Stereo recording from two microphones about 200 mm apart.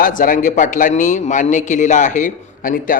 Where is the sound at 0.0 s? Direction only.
40° left (ahead or behind).